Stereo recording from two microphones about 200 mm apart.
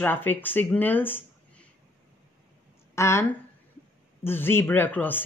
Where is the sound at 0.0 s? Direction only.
10° left (ahead or behind).